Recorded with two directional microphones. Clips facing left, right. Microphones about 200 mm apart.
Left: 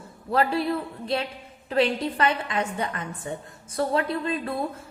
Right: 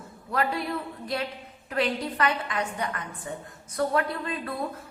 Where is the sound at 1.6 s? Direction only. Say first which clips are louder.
Left 4 dB; 25° left (ahead or behind).